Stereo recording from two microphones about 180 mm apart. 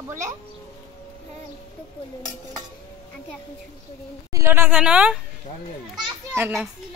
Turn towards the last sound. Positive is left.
turn(degrees=-15)  # may be behind; listen again after turning